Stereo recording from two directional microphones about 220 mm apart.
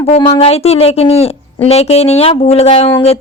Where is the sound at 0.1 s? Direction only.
25° left (ahead or behind).